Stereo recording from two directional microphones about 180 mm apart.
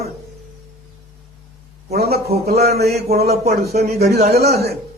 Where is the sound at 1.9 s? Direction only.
60° right (ahead or behind).